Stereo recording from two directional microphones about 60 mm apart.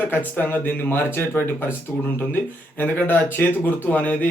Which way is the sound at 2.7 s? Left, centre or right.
Left.